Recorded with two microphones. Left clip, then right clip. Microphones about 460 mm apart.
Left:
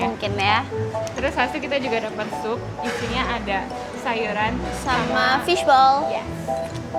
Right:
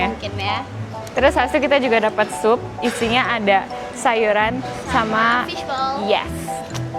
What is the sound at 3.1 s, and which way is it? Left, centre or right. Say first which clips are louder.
A woman's voice: right 9 dB; right.